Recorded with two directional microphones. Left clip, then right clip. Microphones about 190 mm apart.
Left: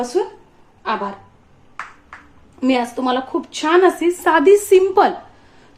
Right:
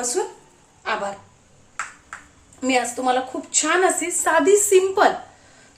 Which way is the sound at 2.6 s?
30° left (ahead or behind).